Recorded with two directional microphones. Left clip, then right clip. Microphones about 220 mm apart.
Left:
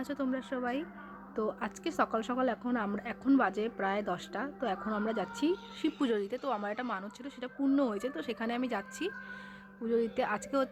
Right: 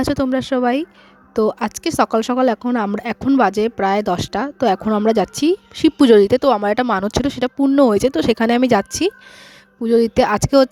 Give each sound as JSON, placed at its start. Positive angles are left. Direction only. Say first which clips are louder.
{"t": 0.2, "sound": "speech", "louder": "right 17 dB", "side_deg": -55}